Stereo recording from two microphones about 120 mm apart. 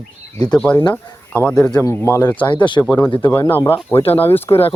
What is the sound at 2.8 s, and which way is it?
Speech, 10° left (ahead or behind).